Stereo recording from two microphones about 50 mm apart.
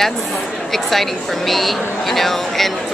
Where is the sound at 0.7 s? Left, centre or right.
Centre.